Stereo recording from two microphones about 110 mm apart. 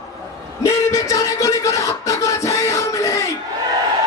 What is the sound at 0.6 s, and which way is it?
Music, 30° left (ahead or behind).